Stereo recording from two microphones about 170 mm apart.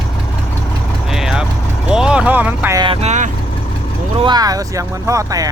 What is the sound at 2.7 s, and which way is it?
Speech, 30° right (ahead or behind).